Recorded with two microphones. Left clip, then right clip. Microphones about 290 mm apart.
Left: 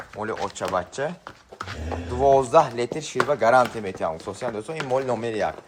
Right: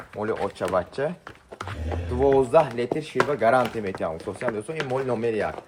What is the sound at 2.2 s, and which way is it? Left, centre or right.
Speech, centre.